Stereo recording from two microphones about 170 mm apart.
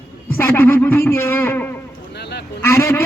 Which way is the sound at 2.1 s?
75° left (ahead or behind).